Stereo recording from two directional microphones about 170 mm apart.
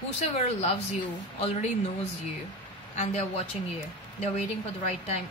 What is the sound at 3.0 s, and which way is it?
Speech, 40° left (ahead or behind).